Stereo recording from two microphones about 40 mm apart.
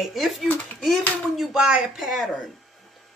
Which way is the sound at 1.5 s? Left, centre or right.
Centre.